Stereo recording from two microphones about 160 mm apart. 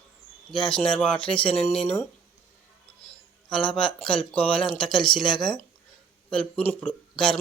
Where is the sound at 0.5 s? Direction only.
30° left (ahead or behind).